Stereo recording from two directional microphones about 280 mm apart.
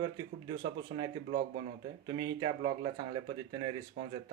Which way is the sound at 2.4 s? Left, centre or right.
Centre.